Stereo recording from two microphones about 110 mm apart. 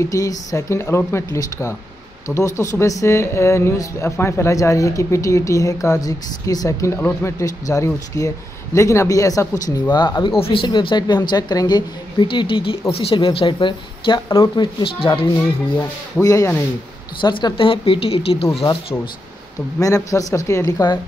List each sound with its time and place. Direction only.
0.1 s speech: 30° left (ahead or behind)
7.0 s speech: 20° left (ahead or behind)
9.9 s a woman's voice: 45° left (ahead or behind)
10.4 s a woman's voice: 55° left (ahead or behind)
16.2 s speech: 30° left (ahead or behind)
17.2 s a woman's voice: 45° left (ahead or behind)
19.8 s speech: 30° left (ahead or behind)